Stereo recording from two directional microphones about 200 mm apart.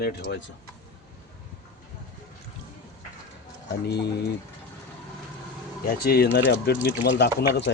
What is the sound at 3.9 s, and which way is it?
Speech, 55° left (ahead or behind).